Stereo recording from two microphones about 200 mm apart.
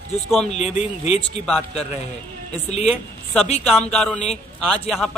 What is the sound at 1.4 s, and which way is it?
Speech, 5° left (ahead or behind).